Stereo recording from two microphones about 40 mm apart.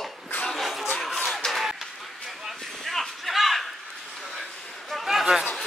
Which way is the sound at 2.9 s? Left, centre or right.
Centre.